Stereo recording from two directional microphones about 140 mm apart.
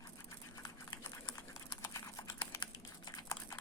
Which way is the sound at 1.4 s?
25° left (ahead or behind).